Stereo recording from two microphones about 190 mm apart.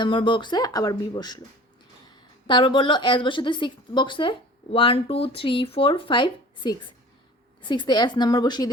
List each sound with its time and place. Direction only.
0.0 s a woman's voice: 25° left (ahead or behind)
2.5 s a woman's voice: 25° left (ahead or behind)